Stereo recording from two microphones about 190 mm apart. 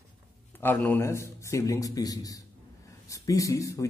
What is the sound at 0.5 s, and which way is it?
A man's voice, 10° left (ahead or behind).